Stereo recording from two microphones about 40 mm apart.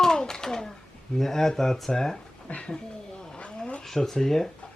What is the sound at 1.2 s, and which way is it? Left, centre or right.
Speech, centre.